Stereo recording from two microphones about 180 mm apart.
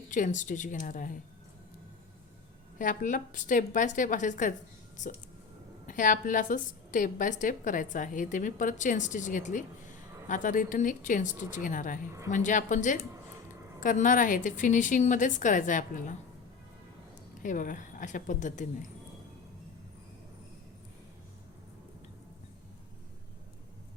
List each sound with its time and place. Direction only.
0.1 s a woman's voice: 45° left (ahead or behind)
2.7 s a woman's voice: 50° left (ahead or behind)
17.4 s a woman's voice: 45° left (ahead or behind)